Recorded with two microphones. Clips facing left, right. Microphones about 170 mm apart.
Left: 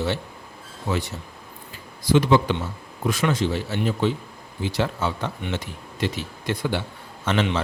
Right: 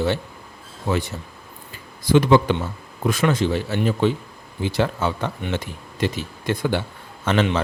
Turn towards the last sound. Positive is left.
turn(degrees=-50)  # may be behind; listen again after turning